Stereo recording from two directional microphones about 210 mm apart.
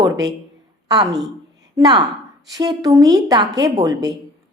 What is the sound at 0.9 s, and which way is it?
A woman's voice, 20° right (ahead or behind).